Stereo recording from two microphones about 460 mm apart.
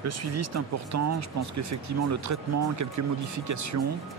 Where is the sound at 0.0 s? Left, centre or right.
Right.